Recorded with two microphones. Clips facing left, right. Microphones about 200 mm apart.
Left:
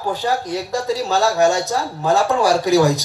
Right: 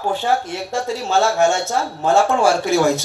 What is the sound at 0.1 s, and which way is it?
Speech, 40° left (ahead or behind).